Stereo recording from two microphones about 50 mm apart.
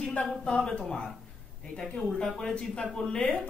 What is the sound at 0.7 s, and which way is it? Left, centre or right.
Speech, centre.